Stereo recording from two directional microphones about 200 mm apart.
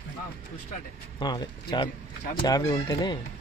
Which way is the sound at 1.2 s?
25° left (ahead or behind).